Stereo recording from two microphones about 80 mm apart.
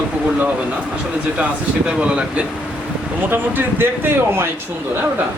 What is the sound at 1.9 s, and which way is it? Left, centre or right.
Speech, centre.